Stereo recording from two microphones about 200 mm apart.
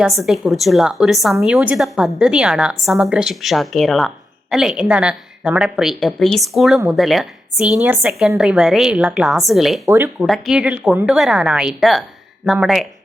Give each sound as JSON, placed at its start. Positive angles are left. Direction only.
{"t": 0.0, "sound": "a woman's voice", "side_deg": 0}
{"t": 9.8, "sound": "speech", "side_deg": -10}
{"t": 10.2, "sound": "a woman's voice", "side_deg": 0}